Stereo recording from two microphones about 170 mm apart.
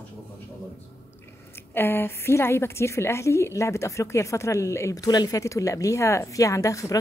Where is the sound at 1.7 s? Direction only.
10° left (ahead or behind).